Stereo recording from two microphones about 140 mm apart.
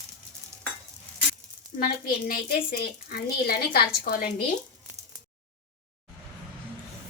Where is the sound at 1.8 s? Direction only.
90° left.